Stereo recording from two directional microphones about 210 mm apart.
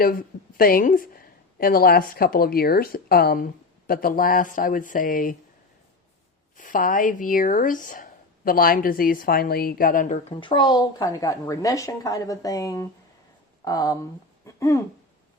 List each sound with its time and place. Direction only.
0.0 s speech: 45° left (ahead or behind)
6.6 s a woman's voice: 40° left (ahead or behind); by 14.0 s 15° left (ahead or behind)
14.4 s a sound: 15° left (ahead or behind)